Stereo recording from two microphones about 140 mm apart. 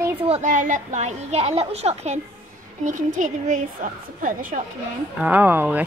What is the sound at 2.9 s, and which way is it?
A woman's voice, 65° right (ahead or behind).